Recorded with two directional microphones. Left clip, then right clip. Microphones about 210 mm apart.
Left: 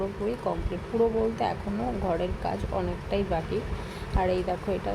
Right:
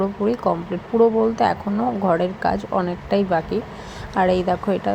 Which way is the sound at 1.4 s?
20° right (ahead or behind).